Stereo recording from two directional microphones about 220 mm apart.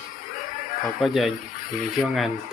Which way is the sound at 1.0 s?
Centre (ahead or behind).